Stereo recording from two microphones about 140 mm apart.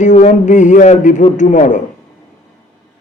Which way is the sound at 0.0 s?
60° left (ahead or behind).